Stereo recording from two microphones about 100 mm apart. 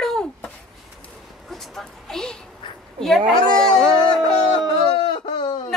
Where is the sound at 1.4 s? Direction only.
5° left (ahead or behind).